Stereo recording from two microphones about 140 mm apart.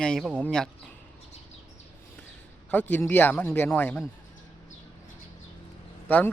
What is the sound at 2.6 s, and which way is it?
Speech, 10° left (ahead or behind).